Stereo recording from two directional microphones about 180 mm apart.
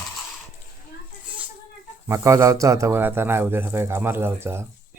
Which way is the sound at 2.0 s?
15° right (ahead or behind).